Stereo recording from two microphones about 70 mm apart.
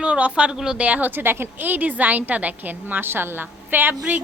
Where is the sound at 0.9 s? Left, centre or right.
Right.